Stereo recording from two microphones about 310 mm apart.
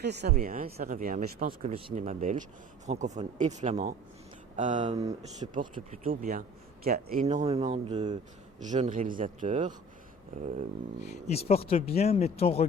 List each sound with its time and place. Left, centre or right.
0.0 s speech: right; by 5.5 s centre
5.5 s speech: right
11.3 s speech: centre